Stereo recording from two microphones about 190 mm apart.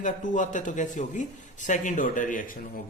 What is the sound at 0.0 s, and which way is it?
A man's voice, 40° left (ahead or behind).